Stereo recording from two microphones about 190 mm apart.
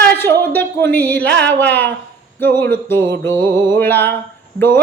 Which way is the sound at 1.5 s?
10° left (ahead or behind).